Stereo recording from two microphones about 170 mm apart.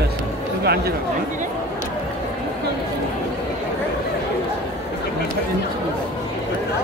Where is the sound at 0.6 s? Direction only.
65° right (ahead or behind).